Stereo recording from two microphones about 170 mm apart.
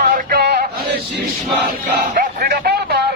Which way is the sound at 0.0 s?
60° right (ahead or behind).